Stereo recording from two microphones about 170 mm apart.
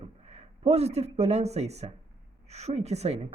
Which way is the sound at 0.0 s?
35° right (ahead or behind).